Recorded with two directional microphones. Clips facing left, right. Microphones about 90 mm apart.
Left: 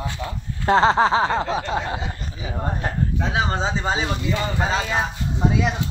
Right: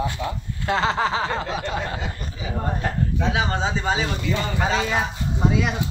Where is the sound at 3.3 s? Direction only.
30° left (ahead or behind).